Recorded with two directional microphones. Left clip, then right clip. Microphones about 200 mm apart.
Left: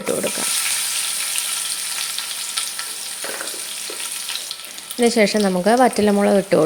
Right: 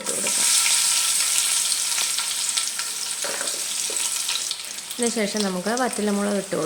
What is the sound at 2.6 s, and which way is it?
Frying, 5° right (ahead or behind).